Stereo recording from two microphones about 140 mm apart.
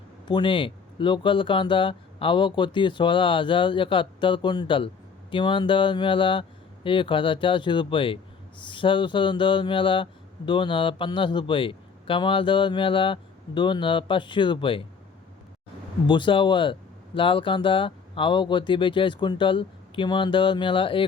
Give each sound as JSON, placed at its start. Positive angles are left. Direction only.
{"t": 0.3, "sound": "speech", "side_deg": 35}
{"t": 16.0, "sound": "speech", "side_deg": 35}